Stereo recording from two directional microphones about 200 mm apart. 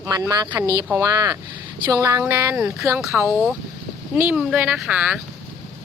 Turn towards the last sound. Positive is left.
turn(degrees=-5)  # may be behind; listen again after turning